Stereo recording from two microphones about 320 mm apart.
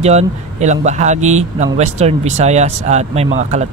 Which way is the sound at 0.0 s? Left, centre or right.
Centre.